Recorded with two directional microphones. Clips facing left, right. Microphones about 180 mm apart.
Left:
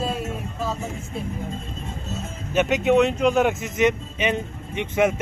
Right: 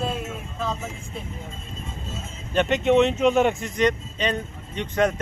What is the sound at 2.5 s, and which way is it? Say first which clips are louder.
Speech: even; 5° left (ahead or behind).